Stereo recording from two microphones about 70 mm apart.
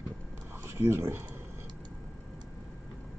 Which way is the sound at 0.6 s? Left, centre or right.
Right.